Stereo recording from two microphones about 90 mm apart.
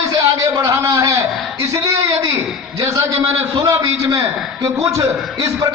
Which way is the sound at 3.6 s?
40° right (ahead or behind).